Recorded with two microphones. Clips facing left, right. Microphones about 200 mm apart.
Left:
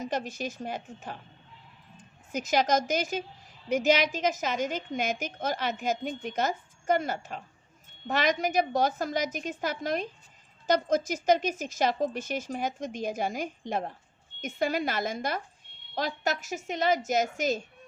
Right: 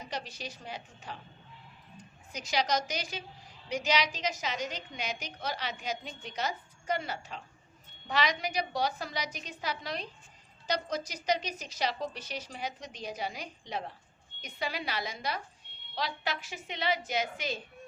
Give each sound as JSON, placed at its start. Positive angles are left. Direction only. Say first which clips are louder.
{"t": 0.0, "sound": "a woman's voice", "louder": "left 8 dB", "side_deg": 50}